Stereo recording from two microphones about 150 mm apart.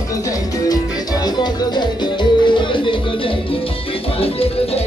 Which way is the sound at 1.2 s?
30° left (ahead or behind).